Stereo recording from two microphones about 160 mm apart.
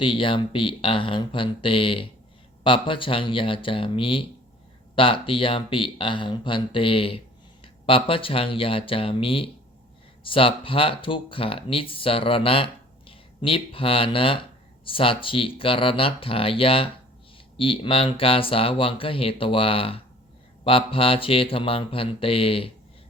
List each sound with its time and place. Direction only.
0.0 s speech: 30° left (ahead or behind)